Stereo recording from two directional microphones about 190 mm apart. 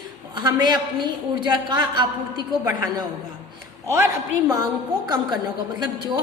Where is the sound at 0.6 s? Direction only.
25° right (ahead or behind).